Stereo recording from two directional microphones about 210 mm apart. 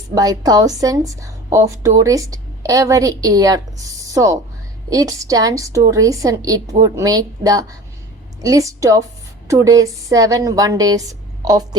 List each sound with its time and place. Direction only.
0.1 s a woman's voice: 15° right (ahead or behind)